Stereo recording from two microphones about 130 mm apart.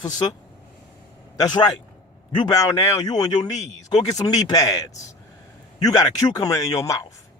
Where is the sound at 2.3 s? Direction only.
35° left (ahead or behind).